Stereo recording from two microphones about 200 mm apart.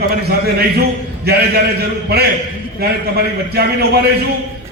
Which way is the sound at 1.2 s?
50° right (ahead or behind).